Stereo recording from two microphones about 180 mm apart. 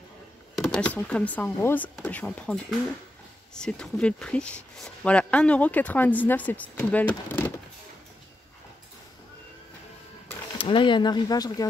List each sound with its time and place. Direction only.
0.6 s speech: 5° left (ahead or behind)
10.6 s speech: 30° left (ahead or behind)